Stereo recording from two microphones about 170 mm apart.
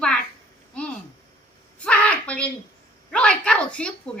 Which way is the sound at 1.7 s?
5° left (ahead or behind).